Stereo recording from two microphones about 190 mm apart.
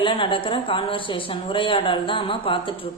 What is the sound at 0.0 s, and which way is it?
A woman's voice, 25° left (ahead or behind).